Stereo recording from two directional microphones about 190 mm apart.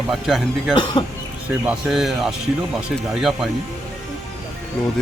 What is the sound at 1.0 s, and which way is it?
Speech, 30° left (ahead or behind).